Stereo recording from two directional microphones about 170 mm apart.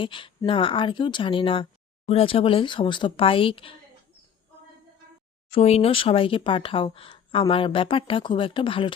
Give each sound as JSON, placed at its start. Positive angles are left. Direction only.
{"t": 0.0, "sound": "speech", "side_deg": 30}
{"t": 5.5, "sound": "speech", "side_deg": 35}